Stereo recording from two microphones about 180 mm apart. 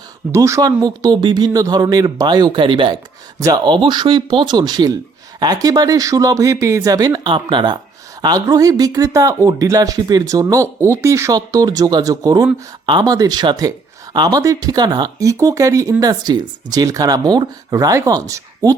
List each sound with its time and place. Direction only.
0.3 s speech: 15° right (ahead or behind)